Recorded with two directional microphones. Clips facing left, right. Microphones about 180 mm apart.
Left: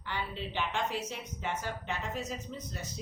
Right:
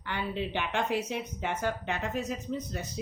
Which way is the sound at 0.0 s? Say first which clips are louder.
Right 5 dB; 60° right (ahead or behind).